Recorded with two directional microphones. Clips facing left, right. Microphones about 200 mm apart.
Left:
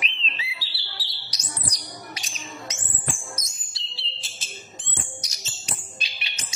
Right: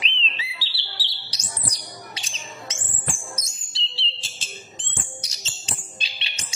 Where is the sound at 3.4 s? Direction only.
30° right (ahead or behind).